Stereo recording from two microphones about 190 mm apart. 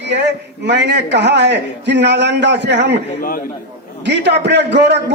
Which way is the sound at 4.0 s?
65° right (ahead or behind).